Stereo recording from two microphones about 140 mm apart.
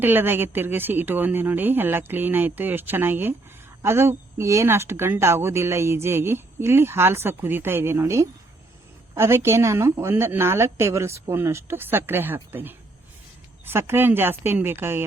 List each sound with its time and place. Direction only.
0.0 s speech: 15° right (ahead or behind)